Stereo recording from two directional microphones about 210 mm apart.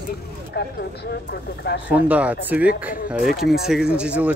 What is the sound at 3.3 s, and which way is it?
Speech, 45° left (ahead or behind).